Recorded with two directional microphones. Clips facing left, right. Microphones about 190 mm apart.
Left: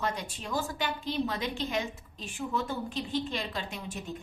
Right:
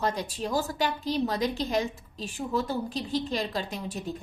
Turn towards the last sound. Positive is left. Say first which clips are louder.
# right 4 dB
turn(degrees=-40)  # may be behind; listen again after turning